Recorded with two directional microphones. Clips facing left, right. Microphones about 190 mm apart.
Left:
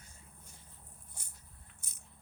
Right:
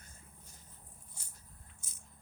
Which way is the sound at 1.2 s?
55° left (ahead or behind).